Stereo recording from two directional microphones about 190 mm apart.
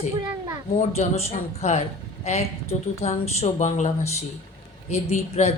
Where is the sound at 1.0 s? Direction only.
35° left (ahead or behind).